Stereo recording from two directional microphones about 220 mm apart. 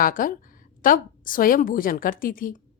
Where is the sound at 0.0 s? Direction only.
40° left (ahead or behind).